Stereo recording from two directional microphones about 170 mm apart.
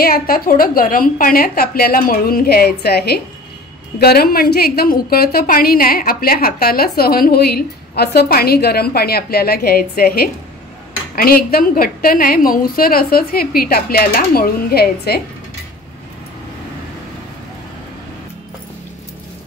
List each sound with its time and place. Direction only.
0.0 s a woman's voice: 60° left (ahead or behind)